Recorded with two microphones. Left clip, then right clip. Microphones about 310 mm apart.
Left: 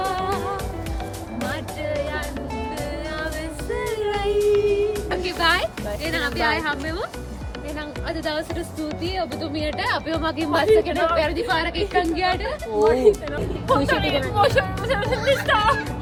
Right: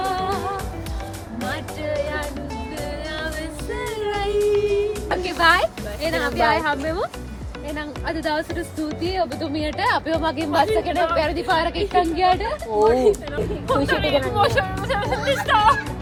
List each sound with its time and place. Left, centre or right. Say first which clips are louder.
0.0 s music: right 1 dB; centre
3.8 s music: left 1 dB; centre
5.0 s music: right 3 dB; centre
8.0 s music: right 3 dB; centre
9.1 s speech: right 3 dB; centre
10.5 s a woman's voice: left 2 dB; centre